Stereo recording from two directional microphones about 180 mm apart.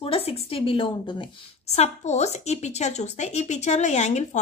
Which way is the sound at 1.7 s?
40° left (ahead or behind).